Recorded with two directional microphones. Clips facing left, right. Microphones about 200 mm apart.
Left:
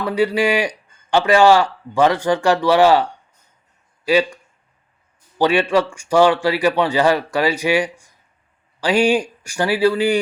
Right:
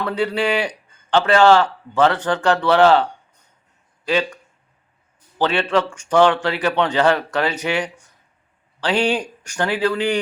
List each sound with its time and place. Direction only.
0.0 s a man's voice: 10° left (ahead or behind)
5.4 s a man's voice: 10° left (ahead or behind)